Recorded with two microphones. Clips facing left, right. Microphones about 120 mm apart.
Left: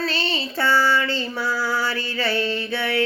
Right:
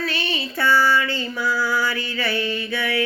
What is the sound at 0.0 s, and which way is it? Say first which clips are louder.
Female singing: left 1 dB; 30° left (ahead or behind).